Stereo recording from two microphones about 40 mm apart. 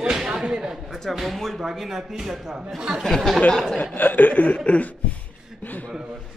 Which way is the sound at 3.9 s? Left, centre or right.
Left.